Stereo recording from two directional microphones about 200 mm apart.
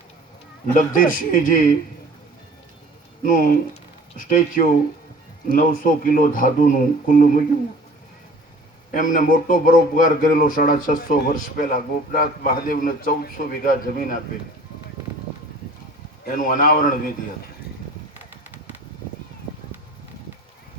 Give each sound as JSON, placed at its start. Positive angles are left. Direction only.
{"t": 0.7, "sound": "a man's voice", "side_deg": 40}
{"t": 3.2, "sound": "a man's voice", "side_deg": 45}
{"t": 8.9, "sound": "a man's voice", "side_deg": 40}
{"t": 16.2, "sound": "a man's voice", "side_deg": 45}